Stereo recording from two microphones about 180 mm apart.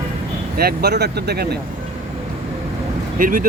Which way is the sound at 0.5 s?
60° right (ahead or behind).